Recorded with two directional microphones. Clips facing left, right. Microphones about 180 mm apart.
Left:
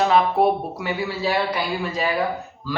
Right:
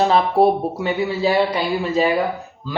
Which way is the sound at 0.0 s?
30° right (ahead or behind).